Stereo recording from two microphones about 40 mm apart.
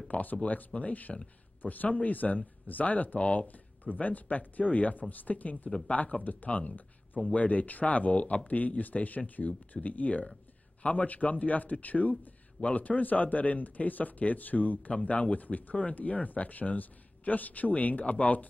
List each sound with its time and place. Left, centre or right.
0.1 s a man's voice: left